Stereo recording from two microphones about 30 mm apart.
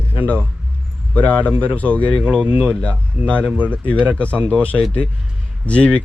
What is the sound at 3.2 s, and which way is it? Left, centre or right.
Speech, right.